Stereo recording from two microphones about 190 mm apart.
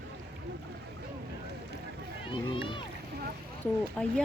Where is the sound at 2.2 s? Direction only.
25° left (ahead or behind).